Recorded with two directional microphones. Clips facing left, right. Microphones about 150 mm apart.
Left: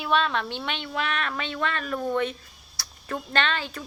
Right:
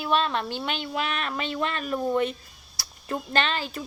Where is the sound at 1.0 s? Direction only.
35° right (ahead or behind).